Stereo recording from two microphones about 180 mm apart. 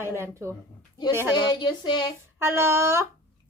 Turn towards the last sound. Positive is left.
turn(degrees=-15)  # may be behind; listen again after turning